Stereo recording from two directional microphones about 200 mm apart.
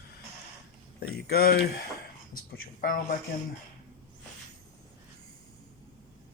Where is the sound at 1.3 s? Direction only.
50° left (ahead or behind).